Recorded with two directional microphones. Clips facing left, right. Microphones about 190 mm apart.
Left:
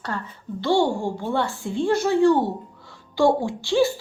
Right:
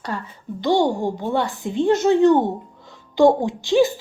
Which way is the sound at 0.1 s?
15° right (ahead or behind).